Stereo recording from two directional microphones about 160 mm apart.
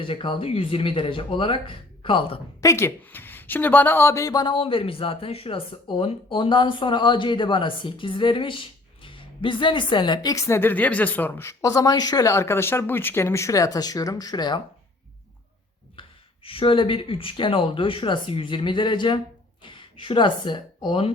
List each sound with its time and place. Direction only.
0.0 s speech: 30° left (ahead or behind)
2.6 s a woman's voice: 20° left (ahead or behind)
16.0 s speech: 35° left (ahead or behind)